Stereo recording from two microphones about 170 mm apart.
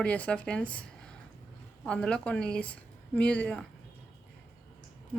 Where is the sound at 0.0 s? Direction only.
10° left (ahead or behind).